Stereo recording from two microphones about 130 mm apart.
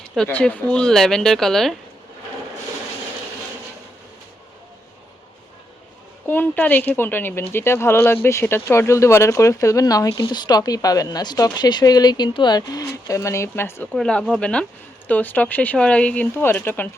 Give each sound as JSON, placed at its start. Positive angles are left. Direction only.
{"t": 0.3, "sound": "speech", "side_deg": 10}
{"t": 6.2, "sound": "speech", "side_deg": 15}
{"t": 13.9, "sound": "speech", "side_deg": 5}